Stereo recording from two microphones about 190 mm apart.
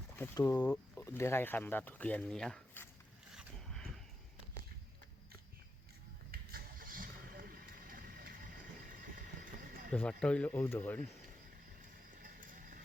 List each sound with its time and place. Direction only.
0.2 s speech: 10° left (ahead or behind)
3.3 s zipper: 5° left (ahead or behind)
6.3 s vehicle: 50° right (ahead or behind)
9.9 s speech: 5° left (ahead or behind)
12.2 s clip-clop: 45° right (ahead or behind)